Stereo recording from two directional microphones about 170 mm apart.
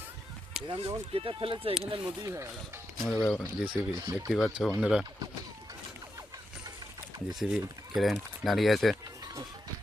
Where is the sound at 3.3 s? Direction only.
5° left (ahead or behind).